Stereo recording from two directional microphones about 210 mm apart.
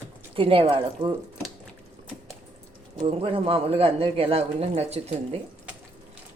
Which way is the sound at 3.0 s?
25° right (ahead or behind).